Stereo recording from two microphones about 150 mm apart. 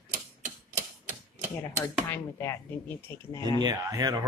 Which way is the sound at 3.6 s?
25° right (ahead or behind).